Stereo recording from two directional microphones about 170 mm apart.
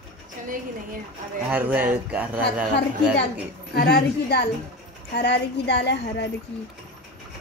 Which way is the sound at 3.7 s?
70° left (ahead or behind).